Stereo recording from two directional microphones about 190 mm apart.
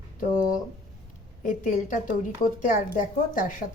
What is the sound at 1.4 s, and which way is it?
A woman's voice, 40° left (ahead or behind).